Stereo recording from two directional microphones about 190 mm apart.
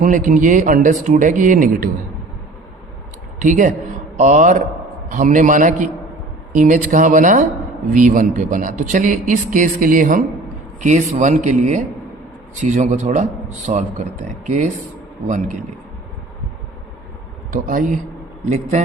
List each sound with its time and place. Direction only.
0.0 s a man's voice: 45° right (ahead or behind)
3.3 s a man's voice: 40° right (ahead or behind)
17.5 s a man's voice: 45° right (ahead or behind)